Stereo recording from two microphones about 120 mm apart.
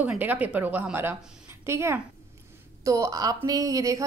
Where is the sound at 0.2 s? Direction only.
15° right (ahead or behind).